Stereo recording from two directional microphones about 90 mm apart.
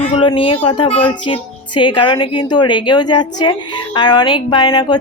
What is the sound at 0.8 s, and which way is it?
Speech, 90° left.